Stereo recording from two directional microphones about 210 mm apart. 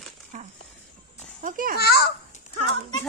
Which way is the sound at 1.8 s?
50° left (ahead or behind).